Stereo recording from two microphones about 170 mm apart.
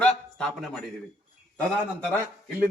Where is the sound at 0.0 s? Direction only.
5° left (ahead or behind).